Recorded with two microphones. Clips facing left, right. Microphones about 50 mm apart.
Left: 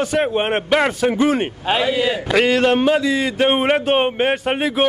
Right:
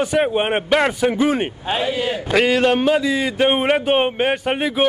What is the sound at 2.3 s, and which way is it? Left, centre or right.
Speech, centre.